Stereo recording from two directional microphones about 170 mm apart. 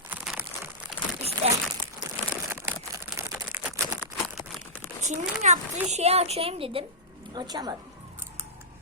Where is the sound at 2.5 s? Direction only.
10° right (ahead or behind).